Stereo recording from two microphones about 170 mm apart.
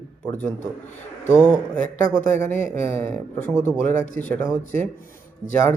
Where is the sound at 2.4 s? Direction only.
10° left (ahead or behind).